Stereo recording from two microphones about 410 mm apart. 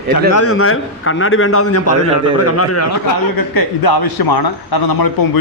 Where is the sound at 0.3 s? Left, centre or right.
Left.